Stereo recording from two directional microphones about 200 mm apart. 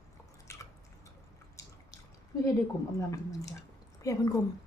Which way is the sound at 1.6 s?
15° left (ahead or behind).